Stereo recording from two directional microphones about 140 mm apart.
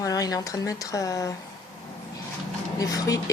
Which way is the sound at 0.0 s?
25° left (ahead or behind).